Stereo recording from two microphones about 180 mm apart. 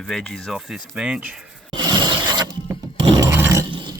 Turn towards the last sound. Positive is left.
turn(degrees=-25)  # may be behind; listen again after turning